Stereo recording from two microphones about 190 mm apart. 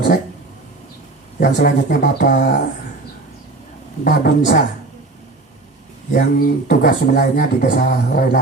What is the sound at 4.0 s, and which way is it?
Speech, 50° left (ahead or behind).